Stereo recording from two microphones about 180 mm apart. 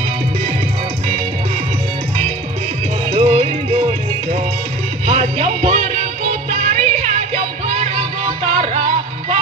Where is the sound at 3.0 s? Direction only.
35° right (ahead or behind).